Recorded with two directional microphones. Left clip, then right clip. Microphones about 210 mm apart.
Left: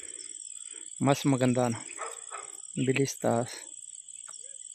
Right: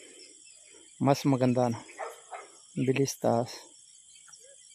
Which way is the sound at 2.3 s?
55° left (ahead or behind).